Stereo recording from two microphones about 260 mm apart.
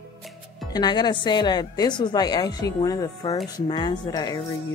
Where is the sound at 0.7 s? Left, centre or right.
Centre.